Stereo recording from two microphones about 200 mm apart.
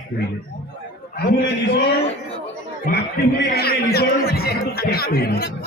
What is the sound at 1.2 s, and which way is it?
A man's voice, 55° left (ahead or behind).